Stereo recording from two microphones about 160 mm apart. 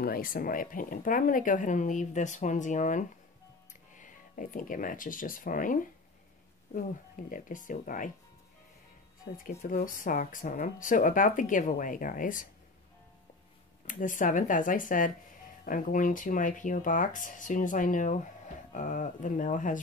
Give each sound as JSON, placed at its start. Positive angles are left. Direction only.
{"t": 0.0, "sound": "speech", "side_deg": 65}
{"t": 7.2, "sound": "speech", "side_deg": 55}
{"t": 9.6, "sound": "speech", "side_deg": 60}
{"t": 13.9, "sound": "speech", "side_deg": 55}